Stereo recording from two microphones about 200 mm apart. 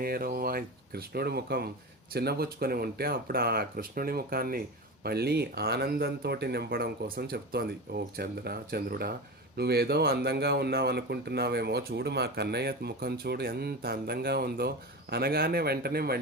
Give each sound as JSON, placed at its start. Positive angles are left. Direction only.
{"t": 0.0, "sound": "speech", "side_deg": -50}